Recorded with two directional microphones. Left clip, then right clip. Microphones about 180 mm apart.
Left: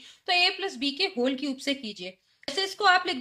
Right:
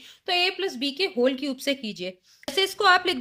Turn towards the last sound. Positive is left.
turn(degrees=-40)  # may be behind; listen again after turning